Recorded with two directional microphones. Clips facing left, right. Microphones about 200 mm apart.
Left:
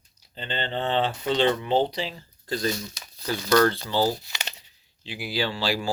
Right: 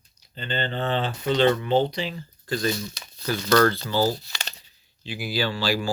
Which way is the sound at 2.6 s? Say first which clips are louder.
Right 1 dB; 30° right (ahead or behind).